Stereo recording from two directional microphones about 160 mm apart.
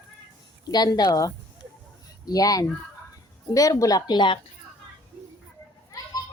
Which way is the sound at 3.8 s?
25° left (ahead or behind).